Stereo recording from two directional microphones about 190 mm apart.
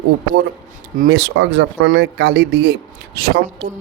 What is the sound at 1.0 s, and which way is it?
Speech, 65° right (ahead or behind).